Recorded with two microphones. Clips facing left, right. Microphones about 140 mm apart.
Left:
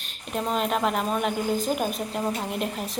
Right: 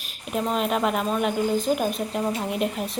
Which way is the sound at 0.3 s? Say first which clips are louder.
Right 2 dB; centre (ahead or behind).